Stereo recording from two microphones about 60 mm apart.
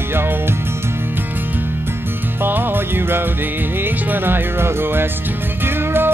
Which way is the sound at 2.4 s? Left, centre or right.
Right.